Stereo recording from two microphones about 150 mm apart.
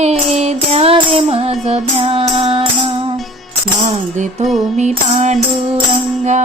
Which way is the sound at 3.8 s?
50° right (ahead or behind).